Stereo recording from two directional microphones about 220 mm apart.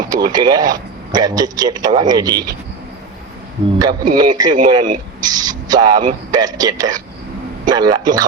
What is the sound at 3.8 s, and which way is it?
Speech, 20° right (ahead or behind).